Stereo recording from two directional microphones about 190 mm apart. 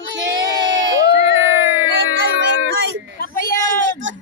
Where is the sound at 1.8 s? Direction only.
90° right.